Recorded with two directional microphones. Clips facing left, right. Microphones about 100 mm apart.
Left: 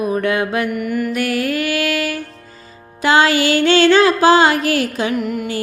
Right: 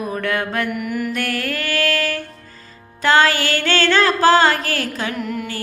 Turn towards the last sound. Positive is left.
turn(degrees=10)  # may be behind; listen again after turning